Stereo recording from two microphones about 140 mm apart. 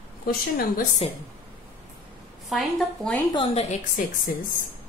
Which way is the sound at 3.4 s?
45° left (ahead or behind).